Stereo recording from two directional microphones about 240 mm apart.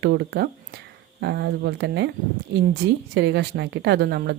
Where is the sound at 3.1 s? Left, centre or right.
Right.